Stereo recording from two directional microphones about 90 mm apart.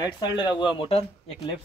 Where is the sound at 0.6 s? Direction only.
70° left (ahead or behind).